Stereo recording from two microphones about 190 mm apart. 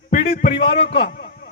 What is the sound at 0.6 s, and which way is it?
Speech, 30° left (ahead or behind).